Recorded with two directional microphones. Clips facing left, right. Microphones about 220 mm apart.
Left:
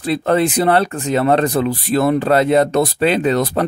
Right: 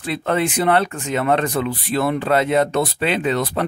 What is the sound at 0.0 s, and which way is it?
Speech, 35° left (ahead or behind).